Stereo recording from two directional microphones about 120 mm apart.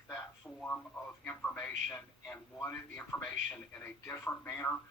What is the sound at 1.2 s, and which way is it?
A man's voice, 15° left (ahead or behind).